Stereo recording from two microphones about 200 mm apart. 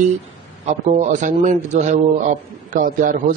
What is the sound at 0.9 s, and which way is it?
A man's voice, 40° right (ahead or behind).